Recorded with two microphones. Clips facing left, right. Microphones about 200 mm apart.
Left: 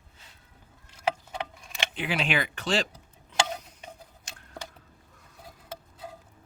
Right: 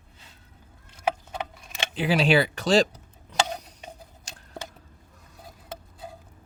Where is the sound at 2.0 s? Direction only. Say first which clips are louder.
Right 8 dB; 35° right (ahead or behind).